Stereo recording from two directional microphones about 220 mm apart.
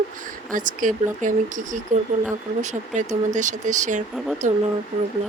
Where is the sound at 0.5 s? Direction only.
35° right (ahead or behind).